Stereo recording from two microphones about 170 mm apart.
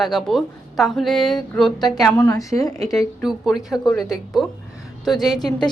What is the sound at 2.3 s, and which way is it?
Speech, 20° left (ahead or behind).